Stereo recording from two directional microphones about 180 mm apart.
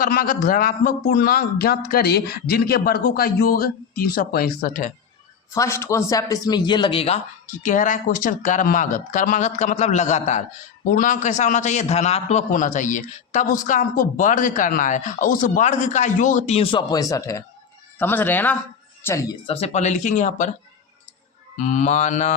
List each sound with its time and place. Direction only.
0.0 s speech: 55° left (ahead or behind)
5.5 s a man's voice: 15° left (ahead or behind)
19.5 s a man's voice: 35° left (ahead or behind)
21.5 s a man's voice: 45° left (ahead or behind)